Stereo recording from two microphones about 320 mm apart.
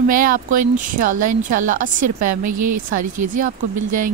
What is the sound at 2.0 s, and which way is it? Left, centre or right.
A woman's voice, right.